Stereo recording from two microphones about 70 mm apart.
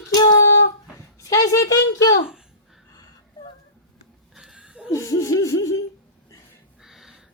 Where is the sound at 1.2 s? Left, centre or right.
Left.